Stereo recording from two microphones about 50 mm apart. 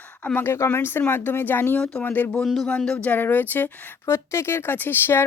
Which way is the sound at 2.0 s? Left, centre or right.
Left.